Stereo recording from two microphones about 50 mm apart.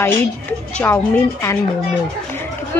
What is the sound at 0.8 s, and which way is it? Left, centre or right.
Speech, left.